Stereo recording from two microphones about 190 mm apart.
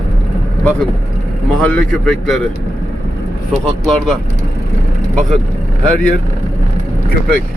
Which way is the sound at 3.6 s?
Centre (ahead or behind).